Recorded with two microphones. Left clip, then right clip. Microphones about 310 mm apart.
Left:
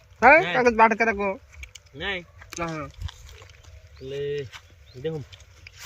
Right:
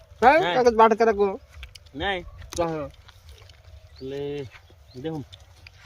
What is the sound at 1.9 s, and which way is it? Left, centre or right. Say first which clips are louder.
Speech: right 3 dB; centre.